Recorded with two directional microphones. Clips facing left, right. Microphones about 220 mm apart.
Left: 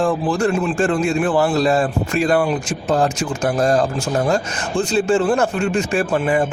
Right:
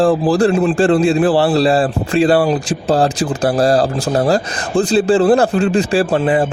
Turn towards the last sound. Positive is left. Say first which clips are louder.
# right 4 dB
turn(degrees=-30)  # may be behind; listen again after turning